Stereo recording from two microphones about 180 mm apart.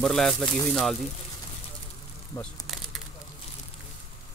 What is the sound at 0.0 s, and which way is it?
Speech, 5° left (ahead or behind).